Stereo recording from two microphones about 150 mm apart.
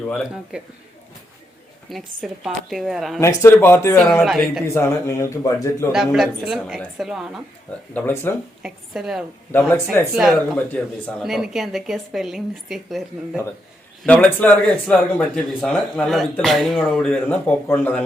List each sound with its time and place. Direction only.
0.5 s a man's voice: 5° right (ahead or behind)
1.9 s a woman's voice: centre (ahead or behind)
3.2 s speech: 20° left (ahead or behind)
4.2 s a woman's voice: centre (ahead or behind)
4.6 s speech: 20° left (ahead or behind)
5.9 s a woman's voice: centre (ahead or behind)
7.9 s speech: 15° left (ahead or behind)
8.6 s a woman's voice: 5° right (ahead or behind)
9.5 s speech: 15° left (ahead or behind)
10.2 s a woman's voice: centre (ahead or behind)
14.0 s speech: 10° left (ahead or behind)